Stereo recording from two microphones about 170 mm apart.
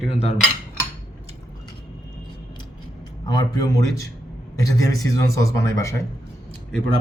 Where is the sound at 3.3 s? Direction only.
25° left (ahead or behind).